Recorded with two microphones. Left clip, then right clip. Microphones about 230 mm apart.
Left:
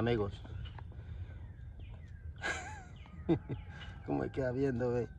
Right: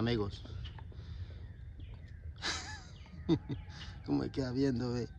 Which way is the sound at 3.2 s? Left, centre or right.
Centre.